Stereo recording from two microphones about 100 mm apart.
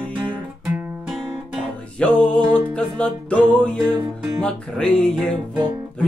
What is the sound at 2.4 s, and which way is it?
Music, 20° right (ahead or behind).